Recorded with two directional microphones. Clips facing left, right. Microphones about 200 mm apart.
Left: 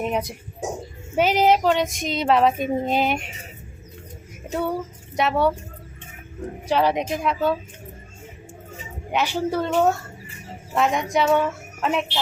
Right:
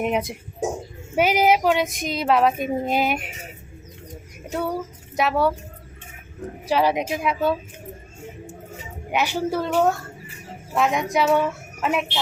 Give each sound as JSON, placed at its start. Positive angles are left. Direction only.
{"t": 0.0, "sound": "speech", "side_deg": -20}
{"t": 1.1, "sound": "a woman's voice", "side_deg": -10}
{"t": 4.5, "sound": "speech", "side_deg": 0}
{"t": 6.7, "sound": "a woman's voice", "side_deg": -5}
{"t": 9.1, "sound": "speech", "side_deg": -5}